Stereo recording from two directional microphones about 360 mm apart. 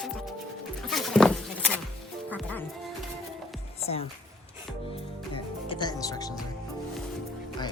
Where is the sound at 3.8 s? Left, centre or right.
Centre.